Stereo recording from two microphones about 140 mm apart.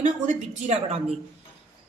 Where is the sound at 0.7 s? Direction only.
50° right (ahead or behind).